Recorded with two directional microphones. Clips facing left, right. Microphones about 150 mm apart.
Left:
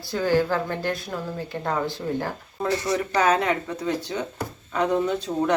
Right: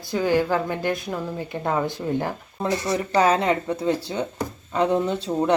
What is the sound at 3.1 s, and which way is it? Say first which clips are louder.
Speech: right 3 dB; 30° right (ahead or behind).